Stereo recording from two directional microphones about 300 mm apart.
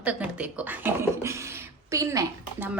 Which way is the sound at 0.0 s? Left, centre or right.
Centre.